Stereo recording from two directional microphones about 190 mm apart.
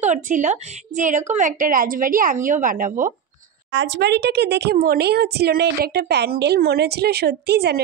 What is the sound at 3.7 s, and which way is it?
Speech, 70° right (ahead or behind).